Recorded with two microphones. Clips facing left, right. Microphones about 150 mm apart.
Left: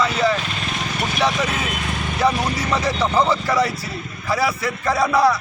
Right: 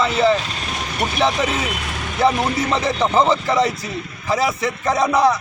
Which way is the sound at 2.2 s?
25° right (ahead or behind).